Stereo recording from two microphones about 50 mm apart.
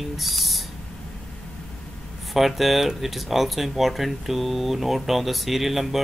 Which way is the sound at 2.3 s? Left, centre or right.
Centre.